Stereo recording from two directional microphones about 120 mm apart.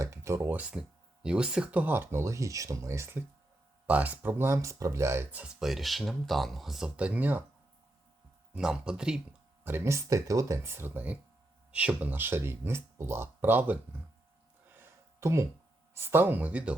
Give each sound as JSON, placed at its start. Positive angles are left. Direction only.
{"t": 0.0, "sound": "speech", "side_deg": -25}
{"t": 5.4, "sound": "speech", "side_deg": -5}
{"t": 8.5, "sound": "speech", "side_deg": -5}
{"t": 9.6, "sound": "speech", "side_deg": -20}
{"t": 14.7, "sound": "a sound", "side_deg": -20}
{"t": 16.0, "sound": "speech", "side_deg": -20}